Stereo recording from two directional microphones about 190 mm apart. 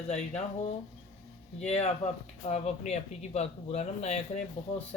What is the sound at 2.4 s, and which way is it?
A man's voice, 35° left (ahead or behind).